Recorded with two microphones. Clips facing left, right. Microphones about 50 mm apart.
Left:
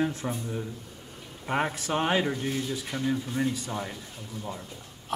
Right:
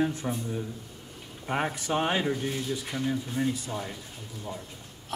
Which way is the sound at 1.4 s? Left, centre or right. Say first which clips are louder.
Left 1 dB; centre.